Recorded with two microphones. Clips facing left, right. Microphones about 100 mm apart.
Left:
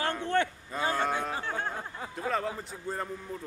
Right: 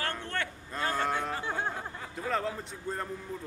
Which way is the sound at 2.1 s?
Centre (ahead or behind).